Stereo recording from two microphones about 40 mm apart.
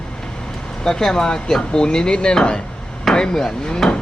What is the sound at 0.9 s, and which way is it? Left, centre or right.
Speech, centre.